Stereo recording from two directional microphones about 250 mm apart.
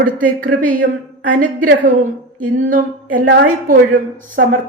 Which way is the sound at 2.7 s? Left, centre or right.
Right.